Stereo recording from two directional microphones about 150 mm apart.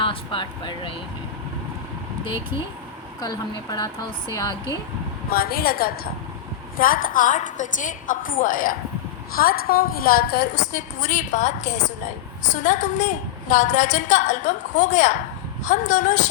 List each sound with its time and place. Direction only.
0.0 s speech: 35° left (ahead or behind)
3.2 s a woman's voice: 25° left (ahead or behind)
5.3 s a woman's voice: 85° left
6.7 s a woman's voice: 70° left (ahead or behind)
9.3 s a woman's voice: 75° left (ahead or behind); by 16.3 s 55° left (ahead or behind)